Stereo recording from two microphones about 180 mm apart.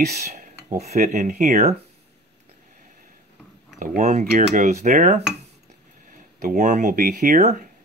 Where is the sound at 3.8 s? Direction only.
45° right (ahead or behind).